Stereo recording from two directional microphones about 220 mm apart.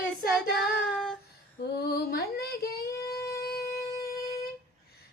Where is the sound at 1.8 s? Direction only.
45° left (ahead or behind).